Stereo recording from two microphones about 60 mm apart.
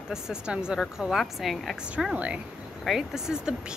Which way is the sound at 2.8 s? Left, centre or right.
Centre.